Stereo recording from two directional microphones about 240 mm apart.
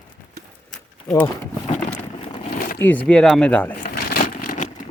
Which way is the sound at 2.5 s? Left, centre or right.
Left.